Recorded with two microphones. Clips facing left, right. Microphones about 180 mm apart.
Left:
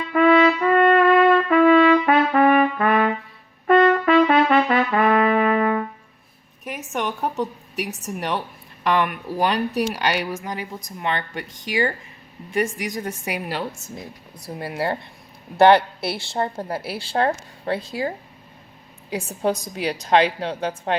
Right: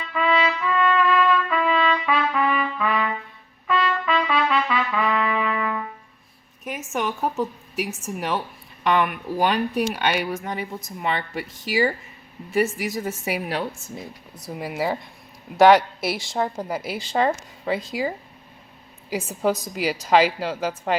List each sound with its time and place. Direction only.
0.1 s trumpet: 55° left (ahead or behind)
6.7 s a woman's voice: centre (ahead or behind)
19.7 s speech: 5° right (ahead or behind)